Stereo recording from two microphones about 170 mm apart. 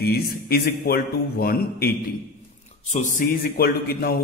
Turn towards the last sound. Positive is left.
turn(degrees=65)  # may be behind; listen again after turning